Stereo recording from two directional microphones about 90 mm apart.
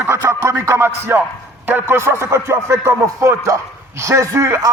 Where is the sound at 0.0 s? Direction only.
25° right (ahead or behind).